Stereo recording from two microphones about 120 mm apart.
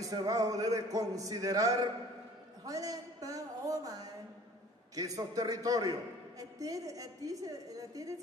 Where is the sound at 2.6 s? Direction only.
30° right (ahead or behind).